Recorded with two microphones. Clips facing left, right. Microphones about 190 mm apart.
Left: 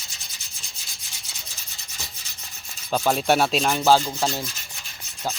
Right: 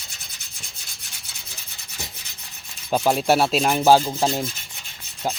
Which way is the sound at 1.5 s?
60° right (ahead or behind).